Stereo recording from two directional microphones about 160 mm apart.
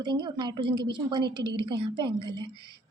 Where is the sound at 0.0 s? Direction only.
25° right (ahead or behind).